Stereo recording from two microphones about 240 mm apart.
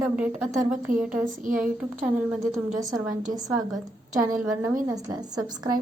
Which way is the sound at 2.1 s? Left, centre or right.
Centre.